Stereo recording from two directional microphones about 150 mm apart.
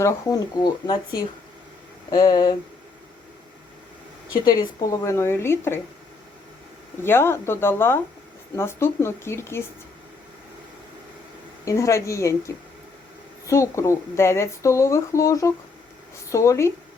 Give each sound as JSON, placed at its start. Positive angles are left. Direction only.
{"t": 0.0, "sound": "speech", "side_deg": 25}
{"t": 4.4, "sound": "speech", "side_deg": 25}
{"t": 7.0, "sound": "speech", "side_deg": 15}
{"t": 11.6, "sound": "speech", "side_deg": 20}